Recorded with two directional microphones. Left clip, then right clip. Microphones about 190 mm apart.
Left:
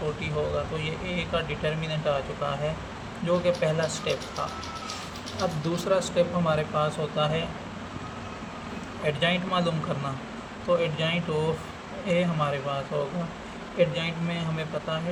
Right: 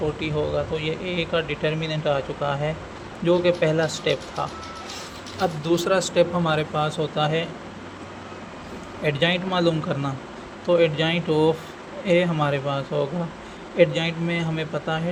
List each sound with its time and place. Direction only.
0.2 s speech: 30° right (ahead or behind)
5.4 s speech: 40° right (ahead or behind)
9.0 s speech: 35° right (ahead or behind)